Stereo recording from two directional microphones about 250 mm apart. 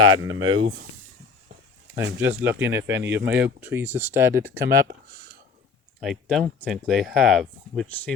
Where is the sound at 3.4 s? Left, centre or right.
Centre.